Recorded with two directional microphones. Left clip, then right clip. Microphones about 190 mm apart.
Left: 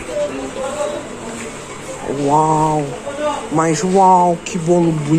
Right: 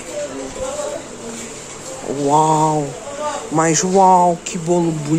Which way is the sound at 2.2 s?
20° right (ahead or behind).